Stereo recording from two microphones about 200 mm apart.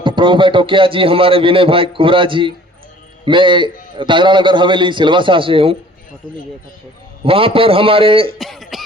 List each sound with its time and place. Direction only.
0.0 s a man's voice: 25° right (ahead or behind)
7.3 s a man's voice: 25° right (ahead or behind)
8.4 s speech: centre (ahead or behind)